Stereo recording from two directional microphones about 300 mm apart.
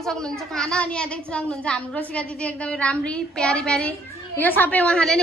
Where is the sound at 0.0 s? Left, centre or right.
Centre.